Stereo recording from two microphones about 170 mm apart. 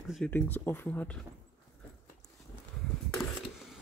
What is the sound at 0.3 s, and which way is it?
Speech, 10° left (ahead or behind).